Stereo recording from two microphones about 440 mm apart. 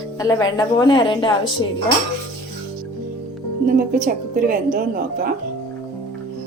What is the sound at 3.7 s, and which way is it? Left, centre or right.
A woman's voice, centre.